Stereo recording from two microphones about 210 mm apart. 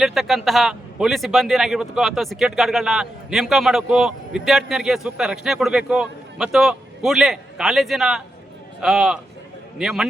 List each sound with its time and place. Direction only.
0.0 s a man's voice: centre (ahead or behind)